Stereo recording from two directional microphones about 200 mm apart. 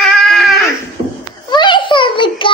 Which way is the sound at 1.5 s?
25° left (ahead or behind).